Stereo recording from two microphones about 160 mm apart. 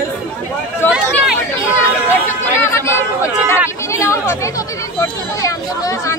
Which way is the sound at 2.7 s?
15° left (ahead or behind).